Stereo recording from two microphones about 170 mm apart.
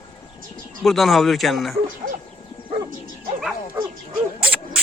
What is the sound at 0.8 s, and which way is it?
Speech, centre (ahead or behind).